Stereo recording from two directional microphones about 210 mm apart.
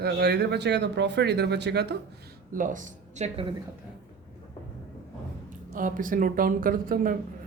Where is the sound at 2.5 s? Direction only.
40° right (ahead or behind).